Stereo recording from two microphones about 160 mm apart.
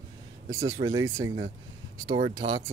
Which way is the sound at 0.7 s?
20° right (ahead or behind).